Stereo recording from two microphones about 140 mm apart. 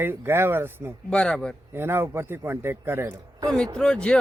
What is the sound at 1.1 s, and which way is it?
Speech, 5° left (ahead or behind).